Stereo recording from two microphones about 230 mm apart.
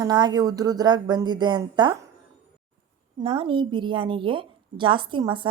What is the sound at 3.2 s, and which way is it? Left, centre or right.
A woman's voice, right.